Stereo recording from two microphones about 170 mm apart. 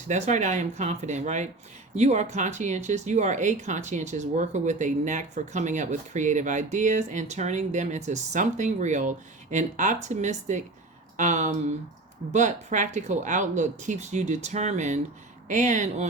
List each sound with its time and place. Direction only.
0.1 s speech: 45° right (ahead or behind)